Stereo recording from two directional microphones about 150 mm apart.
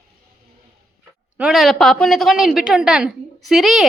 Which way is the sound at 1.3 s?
5° right (ahead or behind).